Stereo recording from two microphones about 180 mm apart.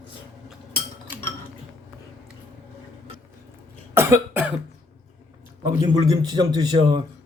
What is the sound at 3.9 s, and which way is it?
Cough, 15° right (ahead or behind).